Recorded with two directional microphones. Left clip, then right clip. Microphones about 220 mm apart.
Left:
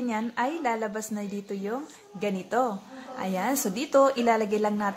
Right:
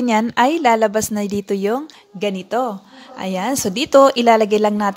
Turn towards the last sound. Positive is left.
turn(degrees=-35)  # may be behind; listen again after turning